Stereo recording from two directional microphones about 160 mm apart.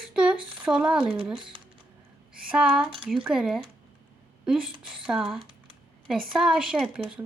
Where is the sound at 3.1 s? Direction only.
5° right (ahead or behind).